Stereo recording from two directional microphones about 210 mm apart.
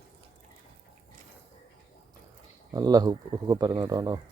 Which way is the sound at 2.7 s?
20° right (ahead or behind).